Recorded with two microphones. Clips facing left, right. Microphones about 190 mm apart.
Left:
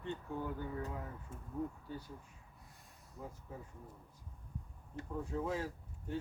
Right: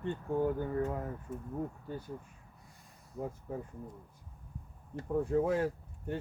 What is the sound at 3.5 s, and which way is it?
Speech, 55° right (ahead or behind).